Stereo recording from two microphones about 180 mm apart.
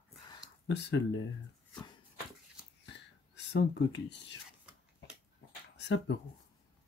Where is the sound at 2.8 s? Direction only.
70° left (ahead or behind).